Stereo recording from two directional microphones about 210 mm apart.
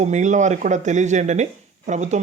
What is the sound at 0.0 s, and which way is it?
Speech, 35° right (ahead or behind).